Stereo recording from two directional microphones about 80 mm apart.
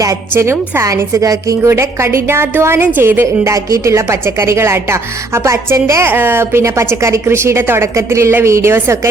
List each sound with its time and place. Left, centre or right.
0.0 s a woman's voice: right
6.1 s a woman's voice: right